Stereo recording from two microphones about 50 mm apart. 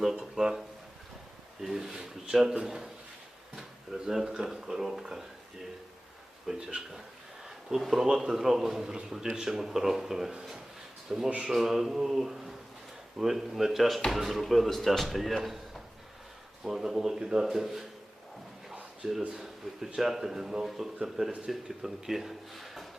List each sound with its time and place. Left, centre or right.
0.0 s speech: centre
1.6 s a sound: centre
2.6 s speech: centre
3.5 s drawer open or close: centre
4.4 s speech: centre
6.5 s speech: centre
7.4 s speech: centre
19.0 s speech: centre